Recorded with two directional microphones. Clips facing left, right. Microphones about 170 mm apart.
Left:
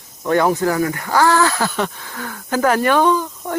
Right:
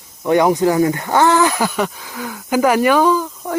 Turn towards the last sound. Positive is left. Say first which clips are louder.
# right 1 dB
turn(degrees=0)  # may be behind; listen again after turning